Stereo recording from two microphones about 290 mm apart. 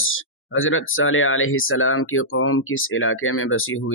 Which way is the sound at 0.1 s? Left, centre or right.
Left.